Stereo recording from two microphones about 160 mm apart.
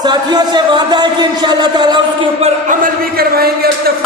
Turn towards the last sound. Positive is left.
turn(degrees=-75)  # may be behind; listen again after turning